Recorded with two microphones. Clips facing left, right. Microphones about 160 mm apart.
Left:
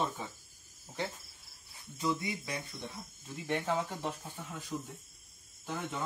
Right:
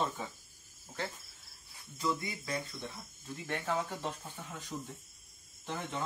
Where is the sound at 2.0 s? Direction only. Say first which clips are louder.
Left 1 dB; 20° left (ahead or behind).